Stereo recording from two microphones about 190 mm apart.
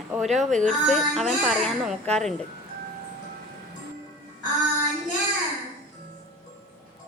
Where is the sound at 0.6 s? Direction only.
Centre (ahead or behind).